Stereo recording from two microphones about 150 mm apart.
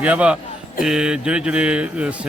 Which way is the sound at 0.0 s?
10° right (ahead or behind).